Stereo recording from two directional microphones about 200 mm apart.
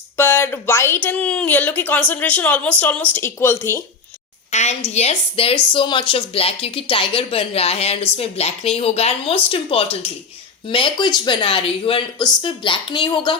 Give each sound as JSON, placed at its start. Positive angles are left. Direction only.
{"t": 0.2, "sound": "a woman's voice", "side_deg": 10}
{"t": 4.5, "sound": "a woman's voice", "side_deg": 35}